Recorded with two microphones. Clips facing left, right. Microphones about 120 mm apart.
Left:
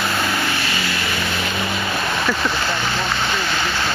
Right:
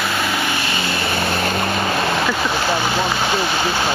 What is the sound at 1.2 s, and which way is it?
Vehicle, 45° right (ahead or behind).